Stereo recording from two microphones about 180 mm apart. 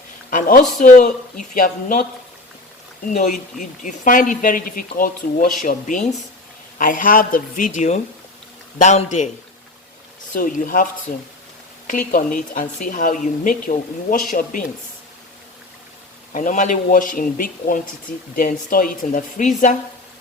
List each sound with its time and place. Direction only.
0.3 s speech: 50° left (ahead or behind)
3.1 s a man's voice: 40° left (ahead or behind)
10.3 s speech: 50° left (ahead or behind)
11.9 s speech: 50° left (ahead or behind)
16.3 s speech: 45° left (ahead or behind)